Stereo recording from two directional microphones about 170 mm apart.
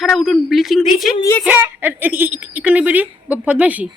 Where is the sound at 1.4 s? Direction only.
10° right (ahead or behind).